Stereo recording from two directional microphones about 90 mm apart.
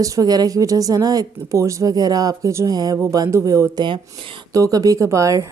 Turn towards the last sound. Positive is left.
turn(degrees=-35)  # may be behind; listen again after turning